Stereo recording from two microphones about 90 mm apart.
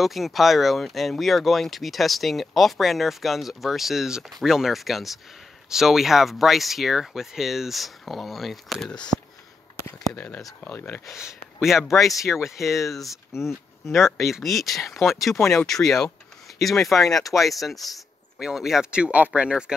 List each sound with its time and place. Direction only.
0.0 s speech: centre (ahead or behind)
10.1 s speech: 20° left (ahead or behind)
12.0 s speech: centre (ahead or behind)